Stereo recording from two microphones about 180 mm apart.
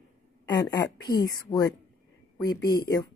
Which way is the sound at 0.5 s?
20° left (ahead or behind).